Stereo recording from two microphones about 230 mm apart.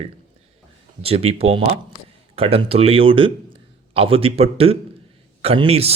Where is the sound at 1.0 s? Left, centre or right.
Right.